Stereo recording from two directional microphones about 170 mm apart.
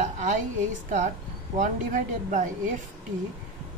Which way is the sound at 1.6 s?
50° right (ahead or behind).